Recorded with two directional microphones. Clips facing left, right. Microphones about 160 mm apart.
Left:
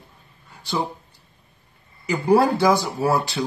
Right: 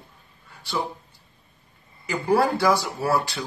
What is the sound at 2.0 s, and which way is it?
Speech, 20° left (ahead or behind).